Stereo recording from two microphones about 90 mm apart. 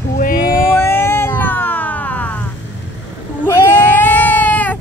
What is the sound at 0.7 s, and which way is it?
Music, 25° left (ahead or behind).